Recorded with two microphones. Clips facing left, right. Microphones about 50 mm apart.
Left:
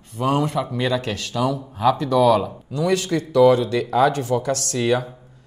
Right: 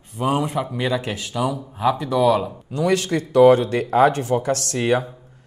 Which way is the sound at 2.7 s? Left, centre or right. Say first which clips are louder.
Right 1 dB; right.